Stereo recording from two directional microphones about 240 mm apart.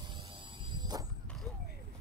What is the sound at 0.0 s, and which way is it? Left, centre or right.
Vehicle, right.